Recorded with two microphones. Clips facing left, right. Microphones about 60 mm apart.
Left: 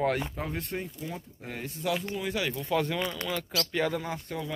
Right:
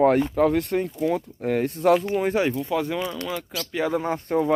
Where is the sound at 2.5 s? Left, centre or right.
Centre.